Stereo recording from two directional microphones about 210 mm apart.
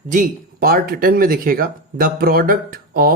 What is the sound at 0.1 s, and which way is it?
Speech, 40° right (ahead or behind).